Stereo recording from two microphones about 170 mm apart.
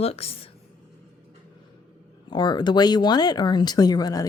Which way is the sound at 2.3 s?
25° left (ahead or behind).